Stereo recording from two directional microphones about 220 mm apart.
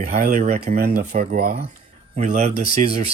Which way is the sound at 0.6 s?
45° right (ahead or behind).